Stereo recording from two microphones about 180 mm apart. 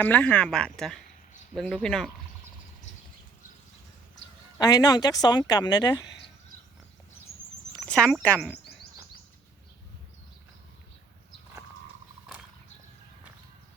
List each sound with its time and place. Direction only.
0.0 s speech: 10° left (ahead or behind)
4.5 s a woman's voice: 20° left (ahead or behind)
7.9 s speech: 5° left (ahead or behind)